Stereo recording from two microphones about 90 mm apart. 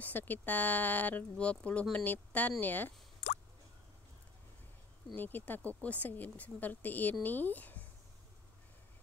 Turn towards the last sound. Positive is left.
turn(degrees=20)  # may be behind; listen again after turning